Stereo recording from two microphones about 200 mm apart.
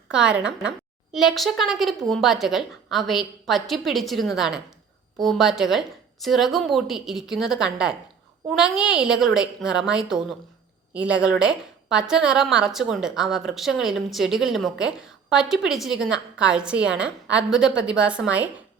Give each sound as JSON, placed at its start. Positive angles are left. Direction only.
{"t": 0.1, "sound": "a woman's voice", "side_deg": -5}